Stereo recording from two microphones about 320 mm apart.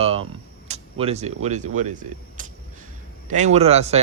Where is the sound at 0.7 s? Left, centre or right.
Centre.